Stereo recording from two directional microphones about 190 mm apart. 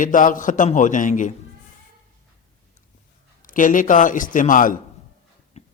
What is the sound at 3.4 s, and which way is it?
Speech, 45° left (ahead or behind).